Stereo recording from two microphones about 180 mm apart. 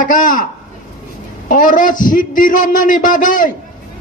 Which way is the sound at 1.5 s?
45° left (ahead or behind).